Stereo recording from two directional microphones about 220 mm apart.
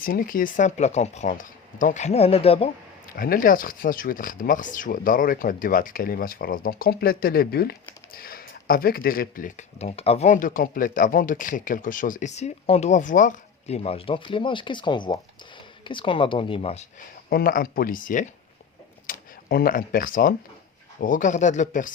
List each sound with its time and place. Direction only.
0.0 s speech: 40° left (ahead or behind)
3.2 s speech: 40° left (ahead or behind)
17.2 s speech: 45° left (ahead or behind)